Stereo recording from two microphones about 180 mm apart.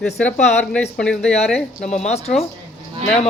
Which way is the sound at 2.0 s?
35° left (ahead or behind).